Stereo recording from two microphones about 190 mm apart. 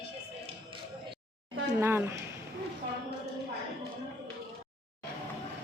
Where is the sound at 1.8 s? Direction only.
15° right (ahead or behind).